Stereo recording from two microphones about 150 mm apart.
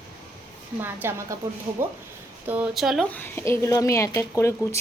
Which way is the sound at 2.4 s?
10° right (ahead or behind).